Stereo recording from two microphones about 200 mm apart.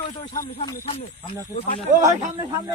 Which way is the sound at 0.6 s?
25° left (ahead or behind).